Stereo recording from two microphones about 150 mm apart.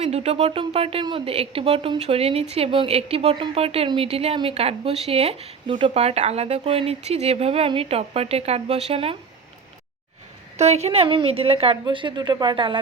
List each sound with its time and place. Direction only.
0.0 s a woman's voice: 45° right (ahead or behind)
10.6 s a woman's voice: 45° right (ahead or behind)